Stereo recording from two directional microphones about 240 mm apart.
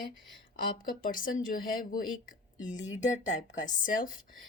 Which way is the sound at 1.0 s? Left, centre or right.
Left.